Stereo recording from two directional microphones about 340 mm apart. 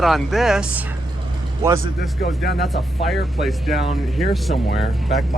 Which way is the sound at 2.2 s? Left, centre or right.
Centre.